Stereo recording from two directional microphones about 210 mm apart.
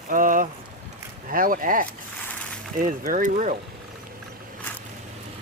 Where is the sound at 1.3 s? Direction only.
40° right (ahead or behind).